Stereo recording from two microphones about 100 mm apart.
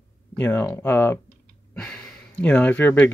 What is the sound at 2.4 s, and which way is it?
Speech, 15° left (ahead or behind).